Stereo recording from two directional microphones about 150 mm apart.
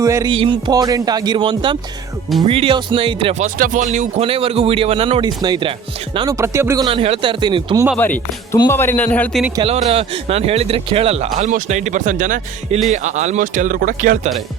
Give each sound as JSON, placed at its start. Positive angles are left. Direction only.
{"t": 0.0, "sound": "a man's voice", "side_deg": -25}
{"t": 3.3, "sound": "speech", "side_deg": -55}
{"t": 4.3, "sound": "a man's voice", "side_deg": -40}
{"t": 6.3, "sound": "speech", "side_deg": -20}
{"t": 6.8, "sound": "a man's voice", "side_deg": -40}
{"t": 7.9, "sound": "a man's voice", "side_deg": 10}
{"t": 9.6, "sound": "a man's voice", "side_deg": -40}
{"t": 11.3, "sound": "speech", "side_deg": -60}